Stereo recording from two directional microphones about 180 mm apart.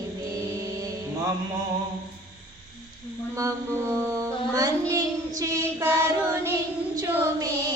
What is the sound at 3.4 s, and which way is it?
Child singing, 15° right (ahead or behind).